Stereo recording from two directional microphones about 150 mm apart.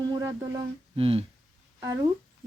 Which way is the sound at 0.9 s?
40° right (ahead or behind).